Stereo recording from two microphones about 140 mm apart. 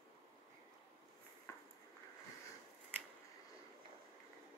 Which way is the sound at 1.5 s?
20° left (ahead or behind).